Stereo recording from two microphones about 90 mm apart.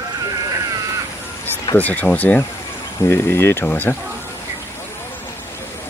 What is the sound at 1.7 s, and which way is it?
Speech, 20° left (ahead or behind).